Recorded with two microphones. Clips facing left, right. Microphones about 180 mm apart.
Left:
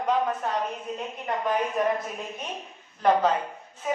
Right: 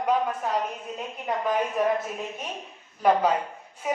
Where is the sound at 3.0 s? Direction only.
10° right (ahead or behind).